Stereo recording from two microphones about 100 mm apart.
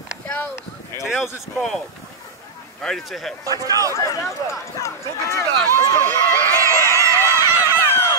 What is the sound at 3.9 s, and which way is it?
Speech, 30° left (ahead or behind).